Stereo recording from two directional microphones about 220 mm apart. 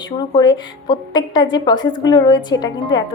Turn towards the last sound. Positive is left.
turn(degrees=20)  # may be behind; listen again after turning